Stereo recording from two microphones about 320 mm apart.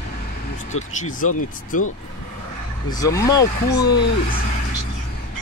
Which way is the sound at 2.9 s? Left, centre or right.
Centre.